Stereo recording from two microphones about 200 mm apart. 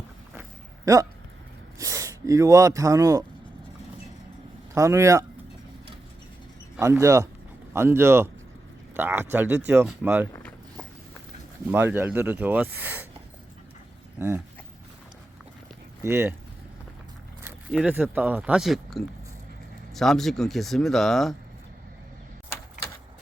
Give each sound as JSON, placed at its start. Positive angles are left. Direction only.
{"t": 1.8, "sound": "speech", "side_deg": -15}
{"t": 4.7, "sound": "speech", "side_deg": -15}
{"t": 6.7, "sound": "speech", "side_deg": -15}
{"t": 11.7, "sound": "speech", "side_deg": -10}
{"t": 14.2, "sound": "speech", "side_deg": -15}
{"t": 16.0, "sound": "speech", "side_deg": -15}
{"t": 17.4, "sound": "speech", "side_deg": -5}